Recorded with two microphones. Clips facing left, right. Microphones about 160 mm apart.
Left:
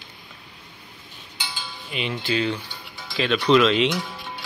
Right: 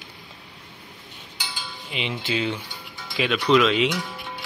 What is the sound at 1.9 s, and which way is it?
Cutlery, 20° right (ahead or behind).